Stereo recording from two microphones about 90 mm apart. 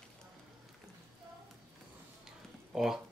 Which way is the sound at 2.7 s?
5° right (ahead or behind).